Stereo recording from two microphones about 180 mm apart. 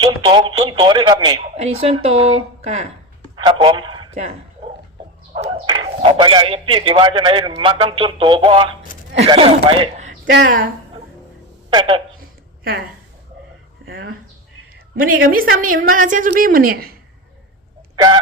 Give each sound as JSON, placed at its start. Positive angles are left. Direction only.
{"t": 0.0, "sound": "a man's voice", "side_deg": -25}
{"t": 5.6, "sound": "a man's voice", "side_deg": -25}
{"t": 10.3, "sound": "speech", "side_deg": -90}
{"t": 11.7, "sound": "a man's voice", "side_deg": -25}
{"t": 13.8, "sound": "speech", "side_deg": -90}
{"t": 15.3, "sound": "a woman's voice", "side_deg": -50}
{"t": 17.9, "sound": "fowl", "side_deg": -30}